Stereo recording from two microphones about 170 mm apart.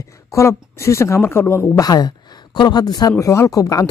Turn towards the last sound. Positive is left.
turn(degrees=20)  # may be behind; listen again after turning